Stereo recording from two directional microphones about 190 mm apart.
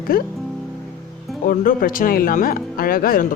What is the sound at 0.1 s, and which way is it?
Speech, 50° left (ahead or behind).